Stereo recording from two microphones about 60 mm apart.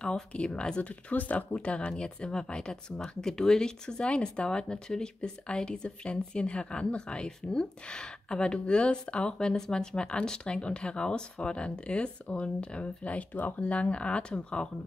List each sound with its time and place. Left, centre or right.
0.0 s speech: centre